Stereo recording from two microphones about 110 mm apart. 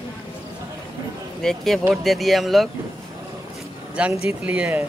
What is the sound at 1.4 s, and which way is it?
Speech, centre (ahead or behind).